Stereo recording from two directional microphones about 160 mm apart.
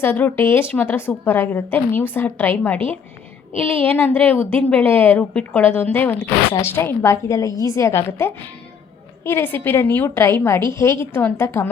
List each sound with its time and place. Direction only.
0.0 s a woman's voice: 10° left (ahead or behind)